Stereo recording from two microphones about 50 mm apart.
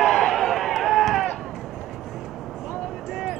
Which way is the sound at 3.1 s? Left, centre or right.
Centre.